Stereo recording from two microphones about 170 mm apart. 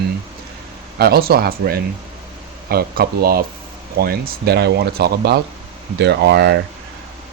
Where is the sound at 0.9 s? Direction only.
65° right (ahead or behind).